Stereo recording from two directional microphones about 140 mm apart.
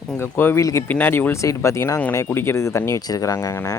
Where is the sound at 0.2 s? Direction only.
15° left (ahead or behind).